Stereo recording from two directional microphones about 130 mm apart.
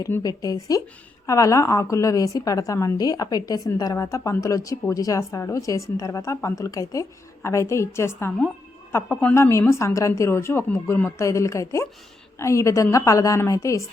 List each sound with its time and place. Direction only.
0.2 s a woman's voice: 30° left (ahead or behind)